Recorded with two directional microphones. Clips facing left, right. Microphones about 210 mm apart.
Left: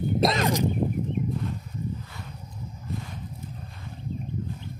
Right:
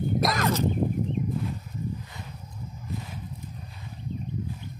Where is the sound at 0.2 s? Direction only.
30° left (ahead or behind).